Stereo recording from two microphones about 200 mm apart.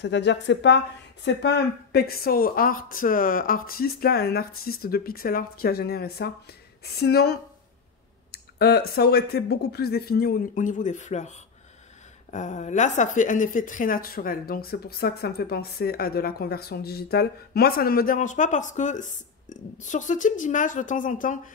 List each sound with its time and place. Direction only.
0.0 s a woman's voice: 60° left (ahead or behind); by 21.4 s 40° left (ahead or behind)